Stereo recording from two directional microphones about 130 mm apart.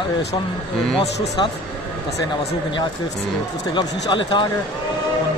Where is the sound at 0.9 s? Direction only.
45° left (ahead or behind).